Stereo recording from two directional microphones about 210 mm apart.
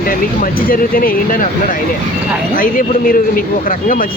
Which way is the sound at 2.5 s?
40° left (ahead or behind).